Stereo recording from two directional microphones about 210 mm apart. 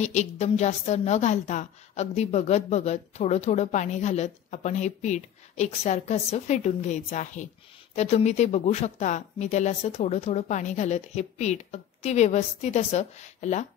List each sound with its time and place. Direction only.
0.0 s a woman's voice: 35° left (ahead or behind)